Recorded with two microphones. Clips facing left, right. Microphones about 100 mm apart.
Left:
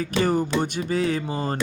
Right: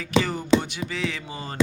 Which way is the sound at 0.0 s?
45° left (ahead or behind).